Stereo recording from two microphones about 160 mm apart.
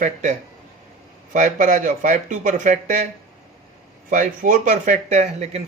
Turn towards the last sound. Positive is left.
turn(degrees=-45)  # may be behind; listen again after turning